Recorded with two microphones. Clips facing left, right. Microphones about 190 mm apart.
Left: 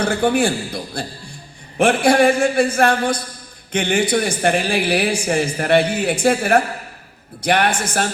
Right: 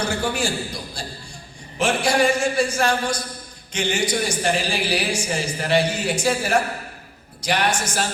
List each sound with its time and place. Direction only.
0.0 s a man's voice: 55° left (ahead or behind)